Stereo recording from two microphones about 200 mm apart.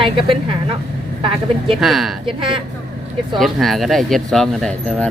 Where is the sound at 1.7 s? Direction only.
Centre (ahead or behind).